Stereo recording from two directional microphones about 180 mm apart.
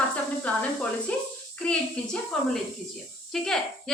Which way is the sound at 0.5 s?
5° left (ahead or behind).